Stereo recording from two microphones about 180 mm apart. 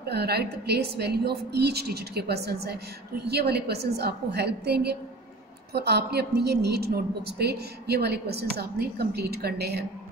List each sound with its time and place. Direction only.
0.1 s a woman's voice: 65° right (ahead or behind)